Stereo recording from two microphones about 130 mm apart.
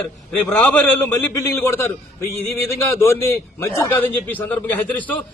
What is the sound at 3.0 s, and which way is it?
A man's voice, 20° left (ahead or behind).